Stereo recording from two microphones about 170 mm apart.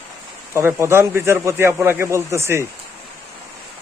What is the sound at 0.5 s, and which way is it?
Speech, 15° right (ahead or behind).